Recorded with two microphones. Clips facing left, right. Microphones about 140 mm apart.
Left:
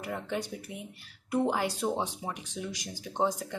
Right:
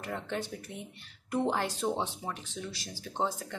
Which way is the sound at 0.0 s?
10° left (ahead or behind).